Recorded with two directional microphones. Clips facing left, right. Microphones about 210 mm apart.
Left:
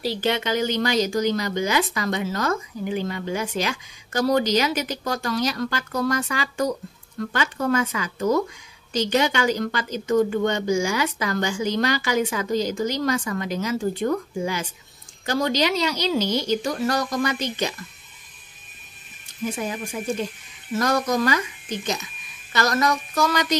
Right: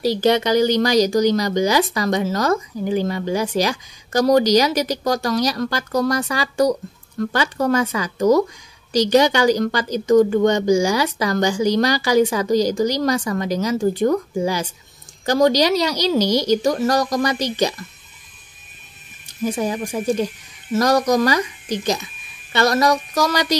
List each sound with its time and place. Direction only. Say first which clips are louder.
0.2 s speech: right 7 dB; 40° right (ahead or behind)
19.4 s speech: right 6 dB; 35° right (ahead or behind)